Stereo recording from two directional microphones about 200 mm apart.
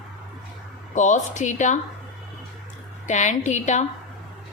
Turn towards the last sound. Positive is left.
turn(degrees=35)  # may be behind; listen again after turning